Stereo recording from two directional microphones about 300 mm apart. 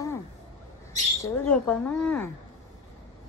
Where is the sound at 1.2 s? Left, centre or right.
Centre.